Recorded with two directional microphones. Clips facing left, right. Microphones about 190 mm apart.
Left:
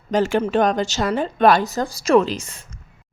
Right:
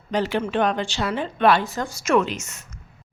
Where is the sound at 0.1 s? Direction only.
45° left (ahead or behind).